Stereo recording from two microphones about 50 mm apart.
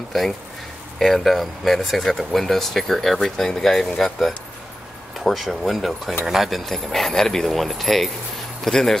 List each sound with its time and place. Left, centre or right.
0.9 s speech: centre